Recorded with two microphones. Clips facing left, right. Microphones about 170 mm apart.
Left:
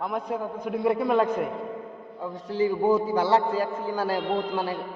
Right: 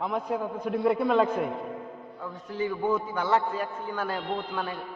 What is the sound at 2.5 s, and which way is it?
A man's voice, 35° left (ahead or behind).